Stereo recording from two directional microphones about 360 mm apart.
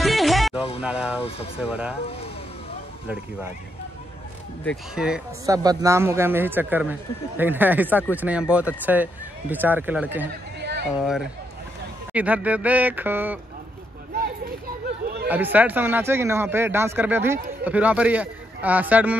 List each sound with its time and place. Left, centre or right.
0.0 s music: centre
0.7 s speech: centre
3.1 s speech: centre
4.6 s speech: centre
10.6 s a sound: right
11.0 s speech: centre
15.2 s speech: centre